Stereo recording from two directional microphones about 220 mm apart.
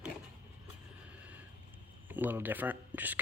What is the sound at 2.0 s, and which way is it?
Speech, 10° right (ahead or behind).